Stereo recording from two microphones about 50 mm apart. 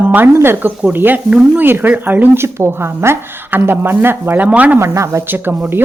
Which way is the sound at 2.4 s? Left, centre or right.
Right.